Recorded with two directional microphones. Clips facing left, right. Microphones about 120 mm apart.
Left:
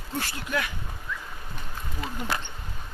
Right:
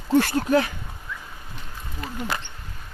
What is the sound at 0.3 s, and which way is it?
Speech, 35° right (ahead or behind).